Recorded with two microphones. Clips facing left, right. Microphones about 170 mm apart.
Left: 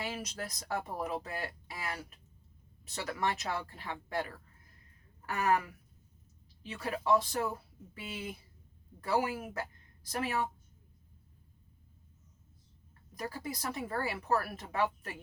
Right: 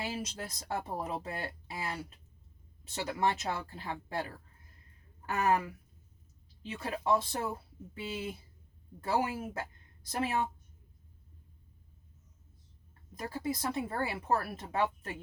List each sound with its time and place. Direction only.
0.0 s speech: 30° right (ahead or behind)
13.1 s speech: 25° right (ahead or behind)